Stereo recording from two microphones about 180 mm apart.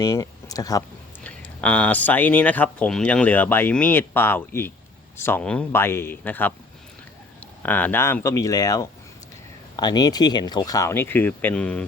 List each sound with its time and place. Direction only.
0.0 s speech: 20° left (ahead or behind)
1.2 s speech: 5° left (ahead or behind)
7.6 s speech: 10° left (ahead or behind)